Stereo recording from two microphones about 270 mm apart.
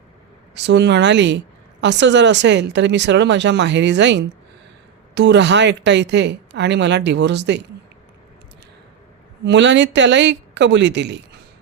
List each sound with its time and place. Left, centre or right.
0.5 s a woman's voice: right
9.4 s a woman's voice: right